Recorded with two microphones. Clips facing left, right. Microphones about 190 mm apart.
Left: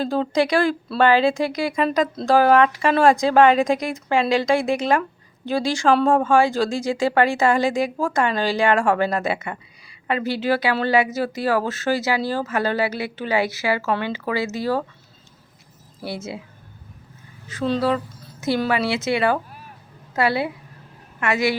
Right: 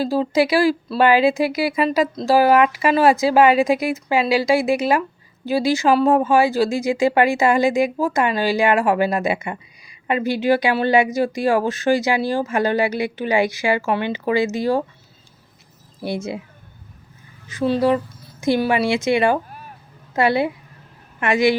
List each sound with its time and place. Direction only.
0.0 s speech: 5° right (ahead or behind)
16.0 s speech: 15° right (ahead or behind)
17.6 s a woman's voice: 15° right (ahead or behind)